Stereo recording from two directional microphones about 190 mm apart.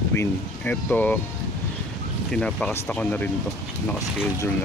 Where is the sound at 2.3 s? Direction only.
5° left (ahead or behind).